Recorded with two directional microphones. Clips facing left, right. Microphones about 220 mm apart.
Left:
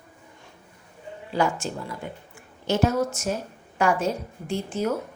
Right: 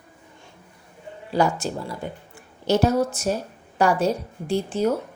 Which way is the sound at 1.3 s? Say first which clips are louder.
Right 3 dB; 40° right (ahead or behind).